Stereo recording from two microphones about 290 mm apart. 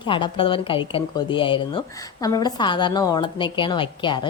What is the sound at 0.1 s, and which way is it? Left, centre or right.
A woman's voice, centre.